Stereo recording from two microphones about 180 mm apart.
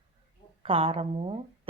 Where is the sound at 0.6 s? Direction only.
30° right (ahead or behind).